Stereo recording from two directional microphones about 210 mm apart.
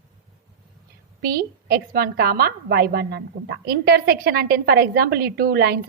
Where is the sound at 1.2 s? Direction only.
45° right (ahead or behind).